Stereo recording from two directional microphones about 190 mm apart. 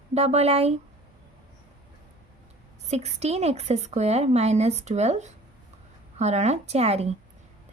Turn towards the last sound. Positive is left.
turn(degrees=-35)  # may be behind; listen again after turning